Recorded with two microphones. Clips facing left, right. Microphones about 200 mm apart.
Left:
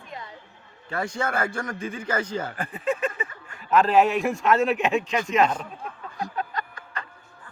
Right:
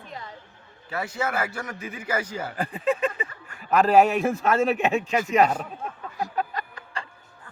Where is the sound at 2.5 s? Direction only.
35° right (ahead or behind).